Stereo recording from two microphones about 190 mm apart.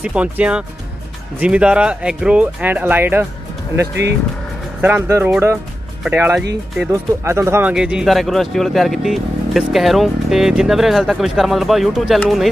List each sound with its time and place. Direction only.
0.0 s speech: 5° right (ahead or behind)
3.8 s speech: 65° right (ahead or behind)
4.8 s speech: 10° right (ahead or behind)